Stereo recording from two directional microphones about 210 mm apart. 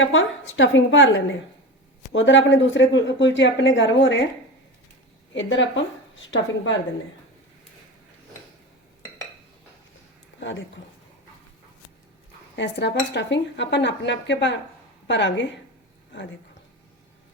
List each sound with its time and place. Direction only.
0.0 s cutlery: 65° left (ahead or behind)
5.3 s cutlery: 60° left (ahead or behind)
12.5 s cutlery: 55° left (ahead or behind)
15.0 s a woman's voice: 60° left (ahead or behind)